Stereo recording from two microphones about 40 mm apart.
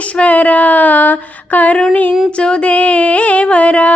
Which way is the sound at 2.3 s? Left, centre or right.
Left.